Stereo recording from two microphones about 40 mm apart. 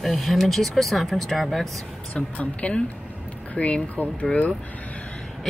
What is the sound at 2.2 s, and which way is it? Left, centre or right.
Speech, left.